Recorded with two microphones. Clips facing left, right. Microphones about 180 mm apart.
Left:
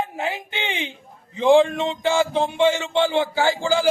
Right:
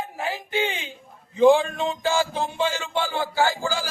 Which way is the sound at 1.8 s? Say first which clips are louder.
Left 3 dB; 25° left (ahead or behind).